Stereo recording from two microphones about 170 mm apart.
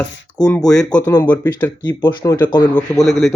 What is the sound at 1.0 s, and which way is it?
Speech, 15° left (ahead or behind).